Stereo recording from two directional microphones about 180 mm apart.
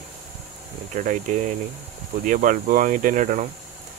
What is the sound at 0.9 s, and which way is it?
Speech, 45° right (ahead or behind).